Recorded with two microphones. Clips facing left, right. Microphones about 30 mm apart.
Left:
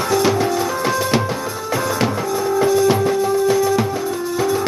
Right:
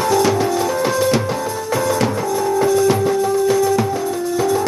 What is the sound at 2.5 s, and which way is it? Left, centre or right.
Music, centre.